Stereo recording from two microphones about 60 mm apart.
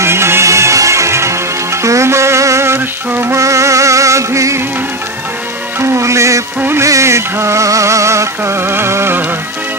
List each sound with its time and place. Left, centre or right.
0.0 s music: right
3.3 s music: right
5.8 s music: right